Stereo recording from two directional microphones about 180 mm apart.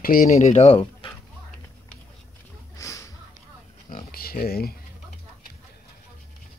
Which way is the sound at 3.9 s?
55° left (ahead or behind).